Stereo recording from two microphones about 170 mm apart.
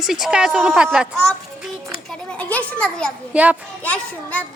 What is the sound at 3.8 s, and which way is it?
Speech, 10° left (ahead or behind).